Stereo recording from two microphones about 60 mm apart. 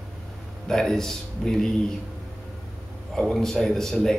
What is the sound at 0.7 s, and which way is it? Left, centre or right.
Speech, centre.